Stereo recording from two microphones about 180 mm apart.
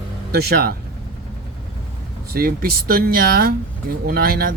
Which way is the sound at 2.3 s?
55° right (ahead or behind).